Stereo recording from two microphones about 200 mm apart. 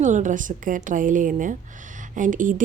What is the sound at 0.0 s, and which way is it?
A woman's voice, 40° right (ahead or behind).